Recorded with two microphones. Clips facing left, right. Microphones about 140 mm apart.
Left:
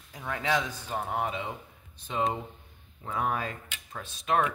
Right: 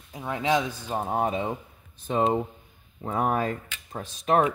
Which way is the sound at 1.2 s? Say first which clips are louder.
Right 6 dB; 40° right (ahead or behind).